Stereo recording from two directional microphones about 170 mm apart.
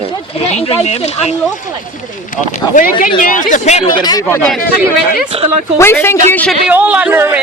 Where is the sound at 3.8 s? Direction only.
25° left (ahead or behind).